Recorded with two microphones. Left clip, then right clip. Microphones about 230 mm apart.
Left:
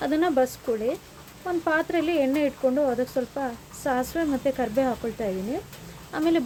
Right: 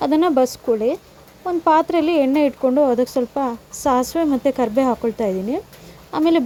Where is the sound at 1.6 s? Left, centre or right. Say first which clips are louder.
Right 9 dB; right.